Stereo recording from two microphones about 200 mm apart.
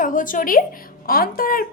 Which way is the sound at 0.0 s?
40° left (ahead or behind).